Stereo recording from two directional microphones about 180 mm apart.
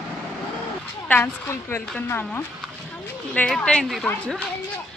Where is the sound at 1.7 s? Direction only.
10° left (ahead or behind).